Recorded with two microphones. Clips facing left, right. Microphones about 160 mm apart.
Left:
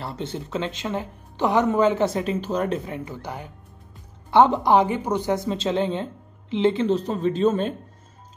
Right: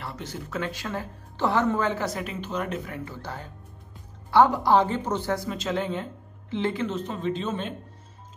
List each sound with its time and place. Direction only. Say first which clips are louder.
0.0 s speech: left 5 dB; 30° left (ahead or behind)